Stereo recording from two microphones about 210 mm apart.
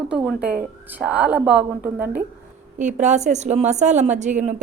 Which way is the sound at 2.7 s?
35° right (ahead or behind).